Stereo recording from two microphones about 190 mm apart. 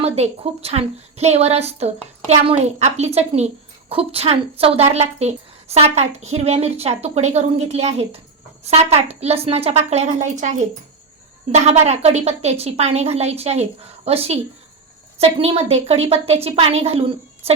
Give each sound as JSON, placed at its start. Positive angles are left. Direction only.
{"t": 0.0, "sound": "a woman's voice", "side_deg": -35}